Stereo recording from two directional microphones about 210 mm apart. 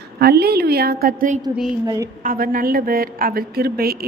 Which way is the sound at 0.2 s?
50° right (ahead or behind).